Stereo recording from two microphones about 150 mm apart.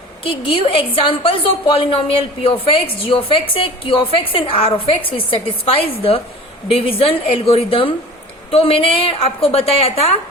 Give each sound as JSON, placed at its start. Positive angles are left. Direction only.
{"t": 0.3, "sound": "a woman's voice", "side_deg": 35}